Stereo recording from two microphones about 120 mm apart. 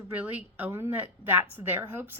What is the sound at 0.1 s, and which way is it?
A woman's voice, 15° right (ahead or behind).